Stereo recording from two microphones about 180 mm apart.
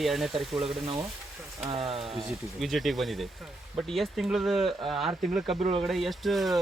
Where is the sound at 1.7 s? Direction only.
35° right (ahead or behind).